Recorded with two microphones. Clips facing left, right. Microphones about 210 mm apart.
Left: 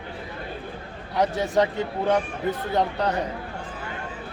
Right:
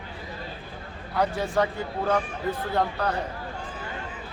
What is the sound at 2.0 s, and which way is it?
Speech, 20° left (ahead or behind).